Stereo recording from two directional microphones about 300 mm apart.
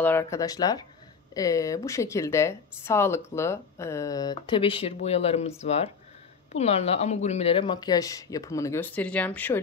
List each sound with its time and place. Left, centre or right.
0.0 s speech: centre